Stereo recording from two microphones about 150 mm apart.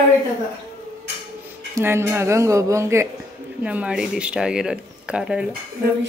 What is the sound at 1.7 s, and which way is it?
Speech, 15° right (ahead or behind).